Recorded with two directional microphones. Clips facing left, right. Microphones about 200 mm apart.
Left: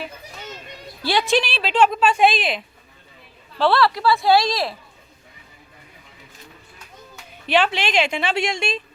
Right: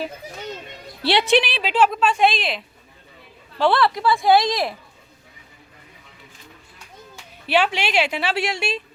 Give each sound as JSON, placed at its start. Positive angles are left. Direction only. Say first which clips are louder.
{"t": 1.0, "sound": "a woman's voice", "louder": "right 2 dB", "side_deg": -70}
{"t": 1.4, "sound": "a woman's voice", "louder": "even", "side_deg": -15}
{"t": 3.6, "sound": "a woman's voice", "louder": "even", "side_deg": -20}
{"t": 7.4, "sound": "a woman's voice", "louder": "left 1 dB", "side_deg": -10}